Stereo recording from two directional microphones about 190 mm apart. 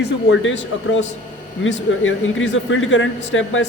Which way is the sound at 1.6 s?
90° left.